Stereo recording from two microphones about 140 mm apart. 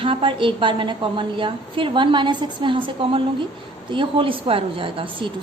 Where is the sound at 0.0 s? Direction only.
40° right (ahead or behind).